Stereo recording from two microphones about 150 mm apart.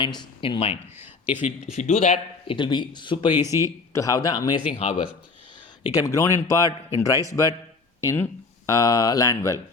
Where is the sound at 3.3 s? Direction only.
20° right (ahead or behind).